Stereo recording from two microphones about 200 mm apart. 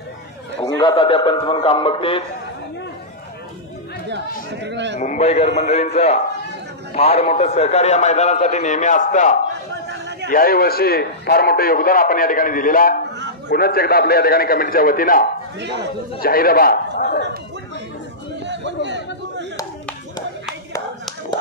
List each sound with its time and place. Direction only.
0.7 s a man's voice: 25° left (ahead or behind)
4.6 s a man's voice: 60° right (ahead or behind)
4.9 s a man's voice: 35° left (ahead or behind)
9.8 s a sound: 60° right (ahead or behind)
10.3 s a man's voice: 45° left (ahead or behind)
18.4 s chatter: 60° right (ahead or behind)